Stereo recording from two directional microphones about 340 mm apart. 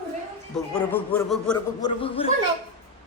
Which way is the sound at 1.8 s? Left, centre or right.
Centre.